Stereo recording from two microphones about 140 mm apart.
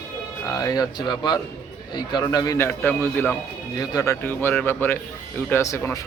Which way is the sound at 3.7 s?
25° left (ahead or behind).